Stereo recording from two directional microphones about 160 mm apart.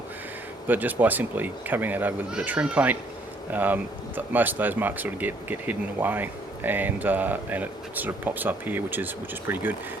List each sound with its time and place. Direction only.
0.7 s speech: 10° right (ahead or behind)